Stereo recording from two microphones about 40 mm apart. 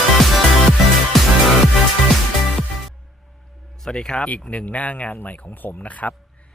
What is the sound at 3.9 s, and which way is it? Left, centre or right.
Speech, centre.